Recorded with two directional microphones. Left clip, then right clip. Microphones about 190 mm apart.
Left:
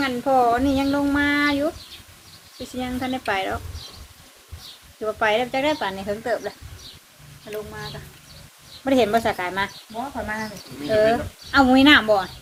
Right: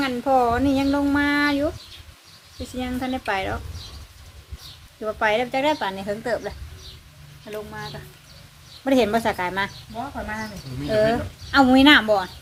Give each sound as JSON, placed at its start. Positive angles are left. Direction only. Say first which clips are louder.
{"t": 0.0, "sound": "speech", "louder": "left 1 dB", "side_deg": -25}
{"t": 2.7, "sound": "speech", "louder": "even", "side_deg": -20}
{"t": 5.0, "sound": "speech", "louder": "left 1 dB", "side_deg": -20}
{"t": 8.8, "sound": "speech", "louder": "left 1 dB", "side_deg": -30}
{"t": 10.2, "sound": "speech", "louder": "left 3 dB", "side_deg": -15}
{"t": 10.8, "sound": "speech", "louder": "left 2 dB", "side_deg": -30}